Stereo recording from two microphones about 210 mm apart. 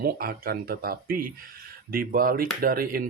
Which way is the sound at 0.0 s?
45° right (ahead or behind).